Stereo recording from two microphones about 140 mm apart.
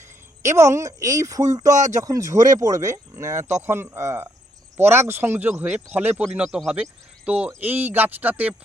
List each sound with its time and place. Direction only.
0.0 s speech: 20° right (ahead or behind)